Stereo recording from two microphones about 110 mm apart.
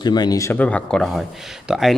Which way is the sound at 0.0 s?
40° left (ahead or behind).